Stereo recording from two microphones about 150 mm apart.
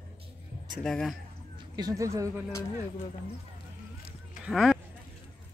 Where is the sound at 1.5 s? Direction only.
25° right (ahead or behind).